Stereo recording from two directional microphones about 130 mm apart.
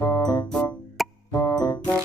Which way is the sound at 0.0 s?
25° left (ahead or behind).